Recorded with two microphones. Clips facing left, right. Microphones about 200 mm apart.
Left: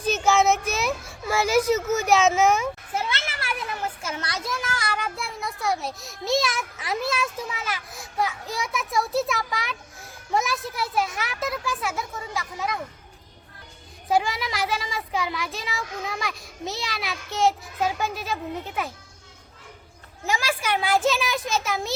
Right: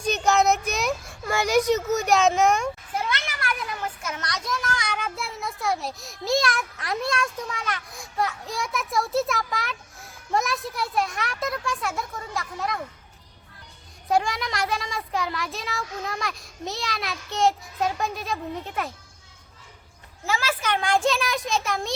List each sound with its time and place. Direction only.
0.0 s a sound: 5° left (ahead or behind)
2.9 s children playing: 25° left (ahead or behind)
4.0 s a child's voice: 30° left (ahead or behind)
4.6 s a child's voice: 5° left (ahead or behind)
14.1 s a child's voice: centre (ahead or behind)
20.2 s a child's voice: 15° left (ahead or behind)